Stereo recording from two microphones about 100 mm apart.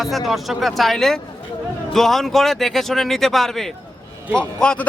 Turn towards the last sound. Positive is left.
turn(degrees=10)  # may be behind; listen again after turning